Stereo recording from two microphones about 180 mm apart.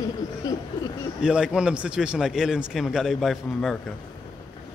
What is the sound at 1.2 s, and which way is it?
A man's voice, 5° right (ahead or behind).